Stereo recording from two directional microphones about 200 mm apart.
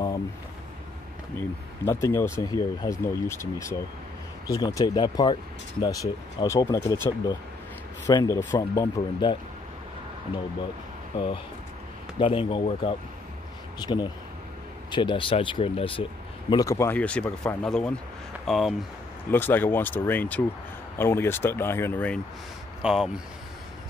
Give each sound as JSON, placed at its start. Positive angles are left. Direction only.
{"t": 1.9, "sound": "speech", "side_deg": 15}
{"t": 11.1, "sound": "speech", "side_deg": 25}
{"t": 19.3, "sound": "speech", "side_deg": 10}
{"t": 22.8, "sound": "speech", "side_deg": -5}